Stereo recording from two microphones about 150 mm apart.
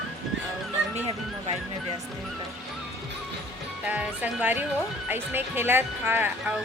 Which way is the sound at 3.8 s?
10° right (ahead or behind).